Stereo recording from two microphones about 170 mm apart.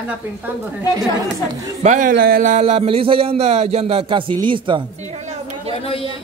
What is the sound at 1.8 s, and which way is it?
A man's voice, 50° right (ahead or behind).